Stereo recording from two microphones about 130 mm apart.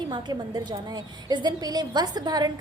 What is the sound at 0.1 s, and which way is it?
A woman's voice, 35° right (ahead or behind).